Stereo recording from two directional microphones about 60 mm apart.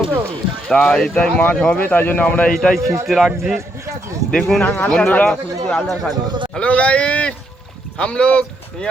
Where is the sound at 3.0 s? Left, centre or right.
Centre.